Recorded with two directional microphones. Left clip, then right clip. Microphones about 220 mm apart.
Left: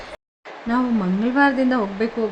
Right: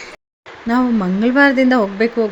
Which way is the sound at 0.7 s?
15° right (ahead or behind).